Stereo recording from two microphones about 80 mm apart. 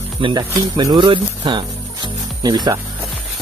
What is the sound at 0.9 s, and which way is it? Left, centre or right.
Speech, right.